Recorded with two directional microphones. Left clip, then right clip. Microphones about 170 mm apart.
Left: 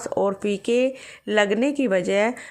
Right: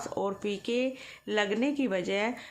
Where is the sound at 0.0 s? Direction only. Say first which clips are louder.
Left 9 dB; 35° left (ahead or behind).